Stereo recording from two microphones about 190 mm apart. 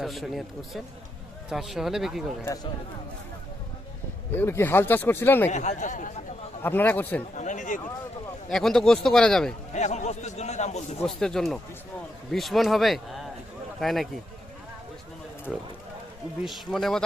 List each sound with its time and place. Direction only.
0.0 s a man's voice: centre (ahead or behind)
4.3 s speech: 10° left (ahead or behind)
5.5 s a man's voice: 40° left (ahead or behind)
6.6 s speech: 10° left (ahead or behind)
7.3 s a man's voice: 40° left (ahead or behind)
8.4 s a man's voice: 5° left (ahead or behind)
9.7 s a man's voice: 35° left (ahead or behind)
11.0 s a man's voice: 5° left (ahead or behind)
16.4 s a man's voice: centre (ahead or behind)